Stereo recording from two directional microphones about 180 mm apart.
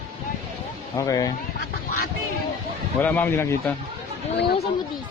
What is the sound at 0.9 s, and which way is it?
Speech, 20° left (ahead or behind).